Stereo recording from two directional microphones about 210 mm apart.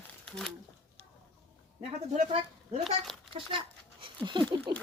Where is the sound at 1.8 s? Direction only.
30° right (ahead or behind).